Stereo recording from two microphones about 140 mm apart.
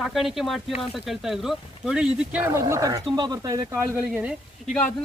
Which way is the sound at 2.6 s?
20° right (ahead or behind).